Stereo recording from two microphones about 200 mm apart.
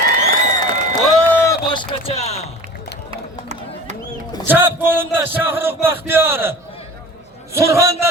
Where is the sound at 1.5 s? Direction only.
25° left (ahead or behind).